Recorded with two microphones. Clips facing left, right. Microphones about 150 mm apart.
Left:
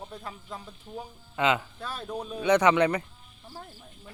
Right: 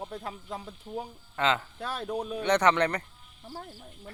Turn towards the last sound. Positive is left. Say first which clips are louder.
# left 2 dB
turn(degrees=10)  # may be behind; listen again after turning